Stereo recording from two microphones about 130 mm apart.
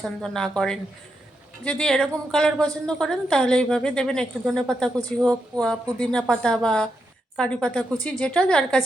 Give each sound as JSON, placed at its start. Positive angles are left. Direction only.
{"t": 0.0, "sound": "a woman's voice", "side_deg": 5}